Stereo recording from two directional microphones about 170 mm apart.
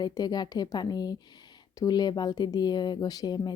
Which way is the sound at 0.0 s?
25° left (ahead or behind).